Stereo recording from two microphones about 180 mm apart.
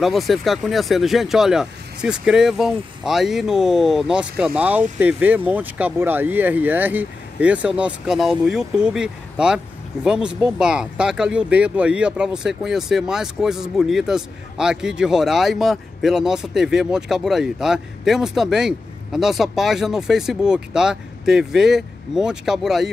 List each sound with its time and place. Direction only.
0.0 s speech: centre (ahead or behind)